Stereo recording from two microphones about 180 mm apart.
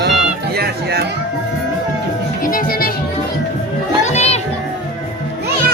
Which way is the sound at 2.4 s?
50° left (ahead or behind).